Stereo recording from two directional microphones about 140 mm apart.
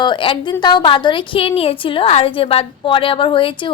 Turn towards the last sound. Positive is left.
turn(degrees=35)  # may be behind; listen again after turning